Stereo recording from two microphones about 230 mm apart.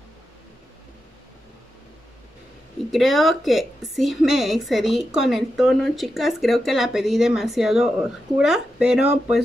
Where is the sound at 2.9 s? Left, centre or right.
Centre.